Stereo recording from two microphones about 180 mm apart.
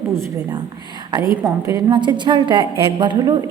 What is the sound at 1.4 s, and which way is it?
A woman's voice, 20° right (ahead or behind).